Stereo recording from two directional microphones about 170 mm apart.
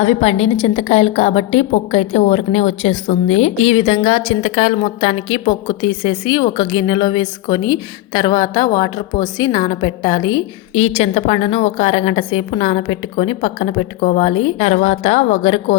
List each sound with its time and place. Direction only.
0.0 s a woman's voice: 35° left (ahead or behind)